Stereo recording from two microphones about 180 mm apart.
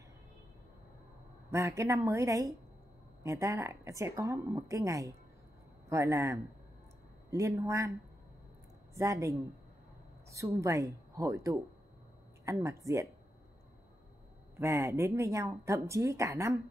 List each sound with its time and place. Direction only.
1.5 s speech: 15° right (ahead or behind)
8.9 s speech: 15° right (ahead or behind)
14.6 s speech: 15° right (ahead or behind)